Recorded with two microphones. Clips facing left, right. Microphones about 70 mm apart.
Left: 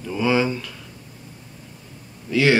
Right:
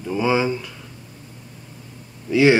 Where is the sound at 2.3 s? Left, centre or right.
Centre.